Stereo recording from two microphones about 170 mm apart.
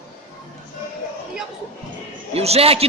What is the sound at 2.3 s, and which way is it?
Speech, 35° right (ahead or behind).